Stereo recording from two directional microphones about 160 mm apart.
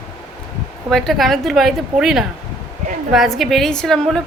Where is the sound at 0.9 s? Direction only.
Centre (ahead or behind).